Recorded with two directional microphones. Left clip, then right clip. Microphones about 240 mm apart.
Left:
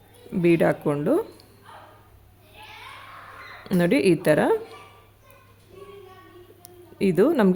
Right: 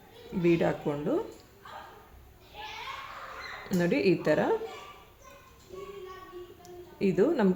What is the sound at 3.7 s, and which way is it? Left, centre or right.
Speech, left.